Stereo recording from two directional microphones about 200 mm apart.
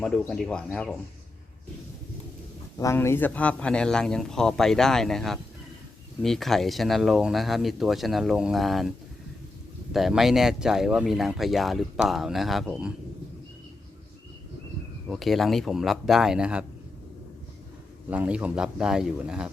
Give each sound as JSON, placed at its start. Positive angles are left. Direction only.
{"t": 0.0, "sound": "speech", "side_deg": 0}
{"t": 2.7, "sound": "speech", "side_deg": 15}
{"t": 9.9, "sound": "speech", "side_deg": 0}
{"t": 15.1, "sound": "speech", "side_deg": 0}
{"t": 18.1, "sound": "speech", "side_deg": -5}